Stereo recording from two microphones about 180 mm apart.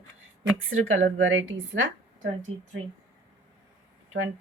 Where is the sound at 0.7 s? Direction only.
90° right.